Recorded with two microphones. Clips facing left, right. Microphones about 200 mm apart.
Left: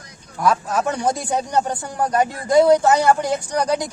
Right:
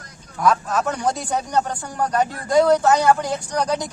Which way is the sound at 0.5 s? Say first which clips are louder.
Left 1 dB; 10° left (ahead or behind).